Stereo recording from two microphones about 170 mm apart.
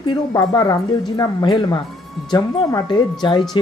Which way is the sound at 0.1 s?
25° left (ahead or behind).